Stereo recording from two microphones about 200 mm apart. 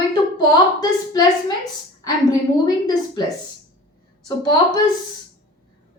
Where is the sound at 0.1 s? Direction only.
20° left (ahead or behind).